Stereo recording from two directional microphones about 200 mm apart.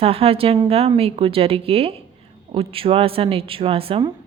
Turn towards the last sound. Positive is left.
turn(degrees=-30)  # may be behind; listen again after turning